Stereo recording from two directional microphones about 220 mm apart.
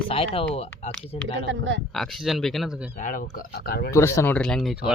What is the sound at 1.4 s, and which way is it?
Speech, 60° right (ahead or behind).